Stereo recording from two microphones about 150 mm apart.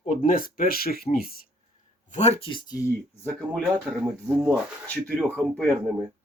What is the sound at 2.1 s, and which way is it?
Speech, 50° left (ahead or behind).